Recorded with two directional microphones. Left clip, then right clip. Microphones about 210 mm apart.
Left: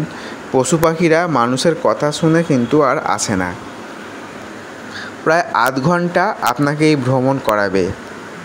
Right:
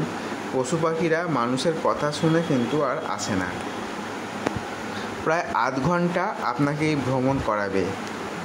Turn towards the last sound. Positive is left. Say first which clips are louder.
# left 9 dB
turn(degrees=35)  # may be behind; listen again after turning